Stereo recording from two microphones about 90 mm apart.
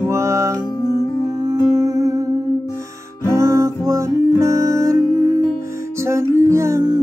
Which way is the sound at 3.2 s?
35° right (ahead or behind).